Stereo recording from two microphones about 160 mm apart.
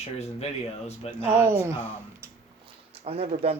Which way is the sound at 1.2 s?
15° right (ahead or behind).